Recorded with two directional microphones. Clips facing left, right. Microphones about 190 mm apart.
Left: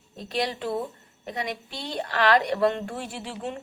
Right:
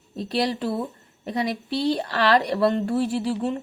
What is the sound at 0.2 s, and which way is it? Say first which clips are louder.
A woman's voice: right 4 dB; 35° right (ahead or behind).